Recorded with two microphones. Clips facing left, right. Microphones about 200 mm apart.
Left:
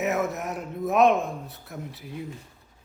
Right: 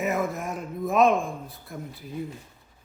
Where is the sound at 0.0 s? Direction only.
5° left (ahead or behind).